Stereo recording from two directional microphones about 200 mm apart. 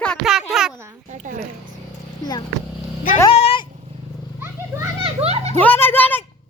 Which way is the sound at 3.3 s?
30° left (ahead or behind).